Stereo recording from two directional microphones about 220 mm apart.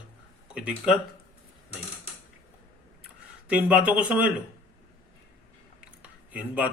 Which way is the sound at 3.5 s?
5° right (ahead or behind).